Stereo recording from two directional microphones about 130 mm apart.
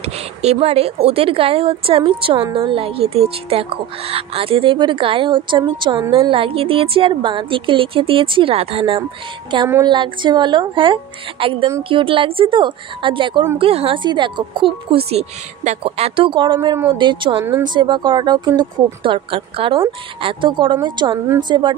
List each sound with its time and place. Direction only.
0.0 s a woman's voice: 55° right (ahead or behind); by 21.7 s 35° right (ahead or behind)